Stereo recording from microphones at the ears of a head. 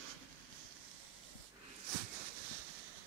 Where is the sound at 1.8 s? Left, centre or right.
Right.